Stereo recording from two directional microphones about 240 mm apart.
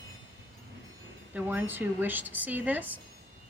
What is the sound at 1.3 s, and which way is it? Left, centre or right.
Speech, centre.